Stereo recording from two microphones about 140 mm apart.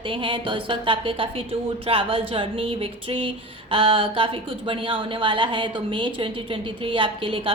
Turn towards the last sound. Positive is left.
turn(degrees=-40)  # may be behind; listen again after turning